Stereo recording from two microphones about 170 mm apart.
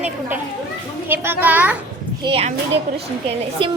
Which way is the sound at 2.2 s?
35° right (ahead or behind).